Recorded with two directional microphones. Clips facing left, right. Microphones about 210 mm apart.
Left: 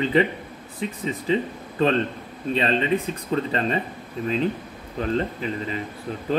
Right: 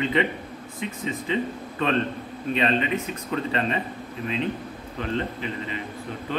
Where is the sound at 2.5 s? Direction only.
35° left (ahead or behind).